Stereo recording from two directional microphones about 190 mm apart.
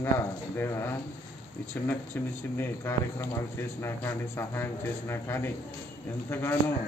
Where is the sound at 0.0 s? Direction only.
15° left (ahead or behind).